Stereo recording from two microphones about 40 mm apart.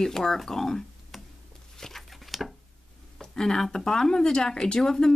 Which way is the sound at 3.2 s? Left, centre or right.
Centre.